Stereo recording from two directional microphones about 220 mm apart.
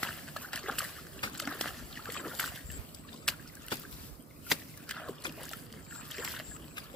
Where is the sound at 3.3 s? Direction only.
Centre (ahead or behind).